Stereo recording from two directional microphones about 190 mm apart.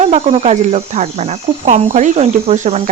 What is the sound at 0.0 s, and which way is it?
Speech, 35° right (ahead or behind).